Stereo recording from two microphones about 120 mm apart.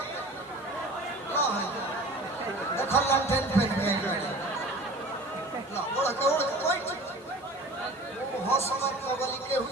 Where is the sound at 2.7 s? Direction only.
20° left (ahead or behind).